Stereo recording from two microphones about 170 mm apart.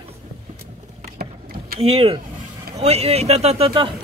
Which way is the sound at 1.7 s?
35° right (ahead or behind).